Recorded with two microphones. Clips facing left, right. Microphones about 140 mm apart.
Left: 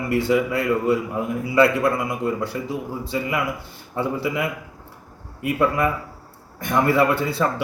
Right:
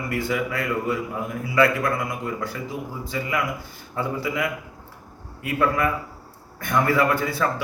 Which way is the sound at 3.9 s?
25° left (ahead or behind).